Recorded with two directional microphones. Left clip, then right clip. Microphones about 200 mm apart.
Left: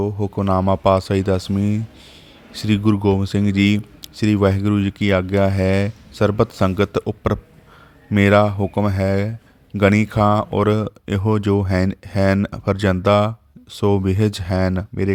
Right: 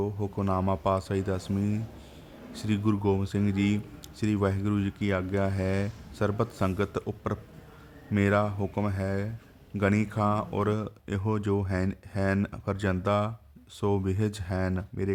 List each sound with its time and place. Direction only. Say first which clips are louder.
0.0 s speech: left 9 dB; 35° left (ahead or behind)